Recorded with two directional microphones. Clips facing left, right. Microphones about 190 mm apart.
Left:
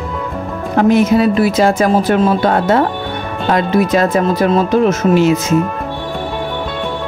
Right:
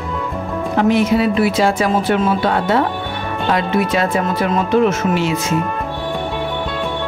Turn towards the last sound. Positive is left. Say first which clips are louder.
# left 6 dB
turn(degrees=45)  # may be behind; listen again after turning